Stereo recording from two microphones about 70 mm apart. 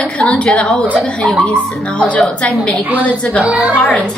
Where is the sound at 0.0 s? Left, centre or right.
Centre.